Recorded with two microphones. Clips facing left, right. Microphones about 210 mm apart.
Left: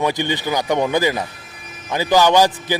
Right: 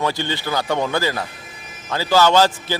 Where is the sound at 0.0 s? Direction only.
15° left (ahead or behind).